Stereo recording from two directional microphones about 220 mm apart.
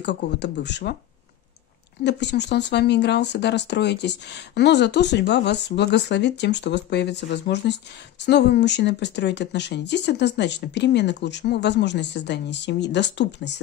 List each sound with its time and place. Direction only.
0.0 s speech: 50° left (ahead or behind)
2.0 s speech: 50° left (ahead or behind)